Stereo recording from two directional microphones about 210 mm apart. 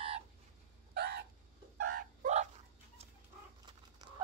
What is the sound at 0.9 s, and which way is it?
Chicken, 50° right (ahead or behind).